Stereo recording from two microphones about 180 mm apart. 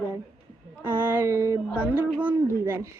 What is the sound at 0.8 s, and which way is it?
A woman's voice, 10° right (ahead or behind).